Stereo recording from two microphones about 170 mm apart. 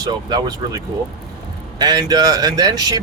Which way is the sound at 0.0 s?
25° right (ahead or behind).